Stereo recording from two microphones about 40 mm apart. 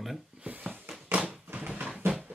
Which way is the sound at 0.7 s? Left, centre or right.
Right.